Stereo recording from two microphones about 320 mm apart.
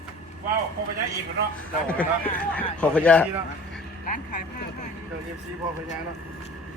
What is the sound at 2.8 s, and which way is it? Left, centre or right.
Speech, centre.